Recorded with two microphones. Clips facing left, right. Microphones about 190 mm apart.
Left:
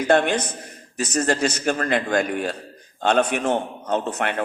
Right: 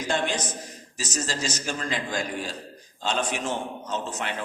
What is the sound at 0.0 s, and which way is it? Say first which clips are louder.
A man's voice: left 8 dB; 60° left (ahead or behind).